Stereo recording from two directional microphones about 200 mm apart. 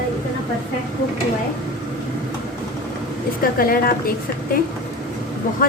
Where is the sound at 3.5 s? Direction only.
50° left (ahead or behind).